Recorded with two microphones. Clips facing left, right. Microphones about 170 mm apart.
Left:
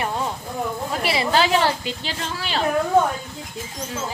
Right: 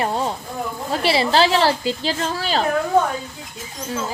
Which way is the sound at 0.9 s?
30° right (ahead or behind).